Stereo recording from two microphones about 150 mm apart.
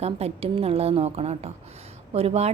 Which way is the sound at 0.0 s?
45° right (ahead or behind).